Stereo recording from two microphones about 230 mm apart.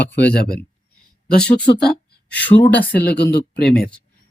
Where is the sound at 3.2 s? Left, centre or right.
Left.